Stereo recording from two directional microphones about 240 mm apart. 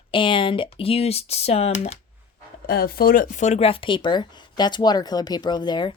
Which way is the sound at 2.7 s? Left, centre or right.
Left.